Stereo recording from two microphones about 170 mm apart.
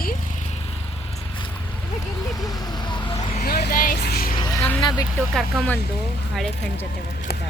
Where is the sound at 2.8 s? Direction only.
25° left (ahead or behind).